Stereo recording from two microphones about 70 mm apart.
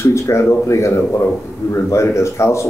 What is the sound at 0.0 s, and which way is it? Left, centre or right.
Speech, left.